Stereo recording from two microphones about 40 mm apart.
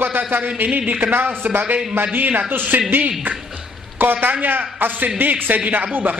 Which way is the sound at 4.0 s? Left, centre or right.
Right.